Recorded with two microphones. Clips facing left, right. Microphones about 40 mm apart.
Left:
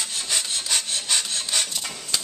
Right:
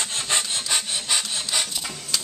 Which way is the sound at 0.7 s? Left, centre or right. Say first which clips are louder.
Even; centre.